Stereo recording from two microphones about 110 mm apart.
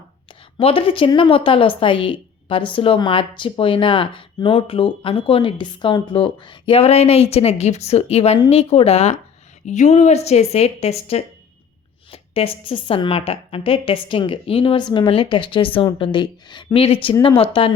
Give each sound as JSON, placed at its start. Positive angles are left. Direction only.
{"t": 0.6, "sound": "a woman's voice", "side_deg": 55}
{"t": 9.6, "sound": "speech", "side_deg": 90}
{"t": 12.1, "sound": "a woman's voice", "side_deg": 60}
{"t": 16.7, "sound": "speech", "side_deg": 55}